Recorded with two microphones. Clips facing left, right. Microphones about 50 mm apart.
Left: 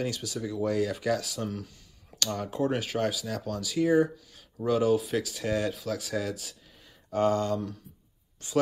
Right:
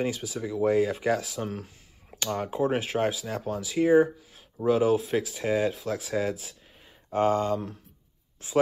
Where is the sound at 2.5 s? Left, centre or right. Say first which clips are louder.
Right 2 dB; centre.